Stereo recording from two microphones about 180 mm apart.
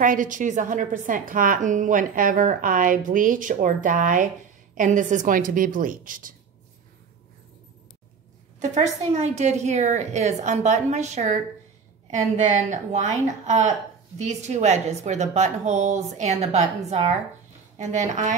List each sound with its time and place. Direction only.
0.0 s a woman's voice: 45° right (ahead or behind)
8.5 s a woman's voice: 40° right (ahead or behind)